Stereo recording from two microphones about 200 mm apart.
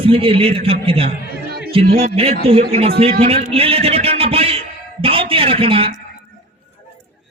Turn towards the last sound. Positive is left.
turn(degrees=-25)  # may be behind; listen again after turning